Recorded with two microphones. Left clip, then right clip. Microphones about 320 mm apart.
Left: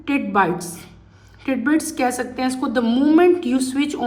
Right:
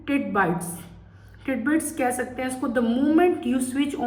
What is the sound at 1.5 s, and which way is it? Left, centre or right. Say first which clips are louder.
Speech: left 4 dB; centre.